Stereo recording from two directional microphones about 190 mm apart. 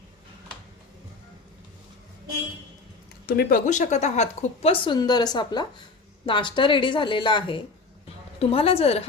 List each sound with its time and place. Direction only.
3.2 s speech: 50° left (ahead or behind); by 9.0 s 30° left (ahead or behind)